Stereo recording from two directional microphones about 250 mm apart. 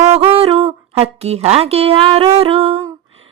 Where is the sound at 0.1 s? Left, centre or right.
Right.